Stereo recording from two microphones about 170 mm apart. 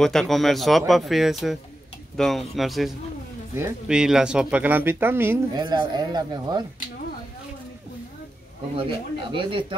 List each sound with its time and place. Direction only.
0.0 s speech: centre (ahead or behind); by 5.4 s 15° right (ahead or behind)
5.5 s speech: 25° right (ahead or behind)
8.7 s speech: 30° right (ahead or behind)